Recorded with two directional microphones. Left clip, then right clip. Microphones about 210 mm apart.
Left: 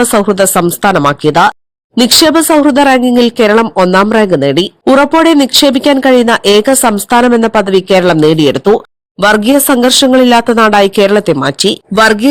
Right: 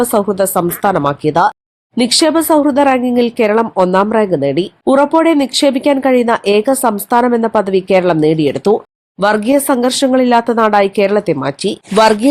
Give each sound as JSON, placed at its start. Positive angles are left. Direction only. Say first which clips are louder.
{"t": 0.0, "sound": "speech", "louder": "left 4 dB", "side_deg": 25}